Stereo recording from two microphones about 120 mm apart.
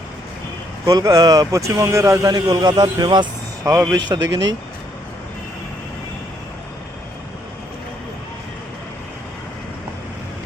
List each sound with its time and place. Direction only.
0.9 s speech: 30° right (ahead or behind)